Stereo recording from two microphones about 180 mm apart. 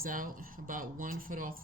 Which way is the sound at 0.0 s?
50° right (ahead or behind).